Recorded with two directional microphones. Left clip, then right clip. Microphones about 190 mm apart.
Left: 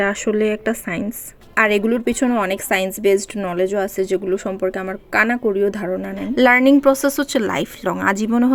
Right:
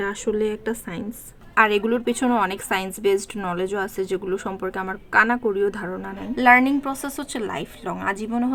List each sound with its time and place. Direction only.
0.0 s a woman's voice: 20° left (ahead or behind)